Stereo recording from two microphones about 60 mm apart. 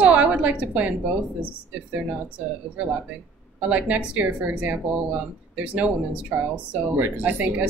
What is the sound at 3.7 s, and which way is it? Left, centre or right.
Speech, right.